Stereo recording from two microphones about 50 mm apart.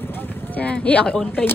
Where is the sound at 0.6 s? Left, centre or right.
Left.